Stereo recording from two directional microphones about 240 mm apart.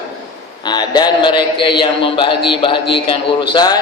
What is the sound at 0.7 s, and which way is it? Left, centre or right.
A man's voice, centre.